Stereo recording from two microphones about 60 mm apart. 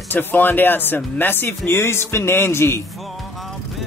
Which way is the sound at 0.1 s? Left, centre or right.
Left.